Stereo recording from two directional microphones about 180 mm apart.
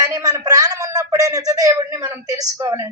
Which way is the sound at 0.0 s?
20° right (ahead or behind).